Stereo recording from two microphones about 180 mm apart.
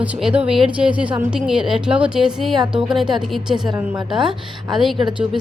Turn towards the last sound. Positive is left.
turn(degrees=0)  # may be behind; listen again after turning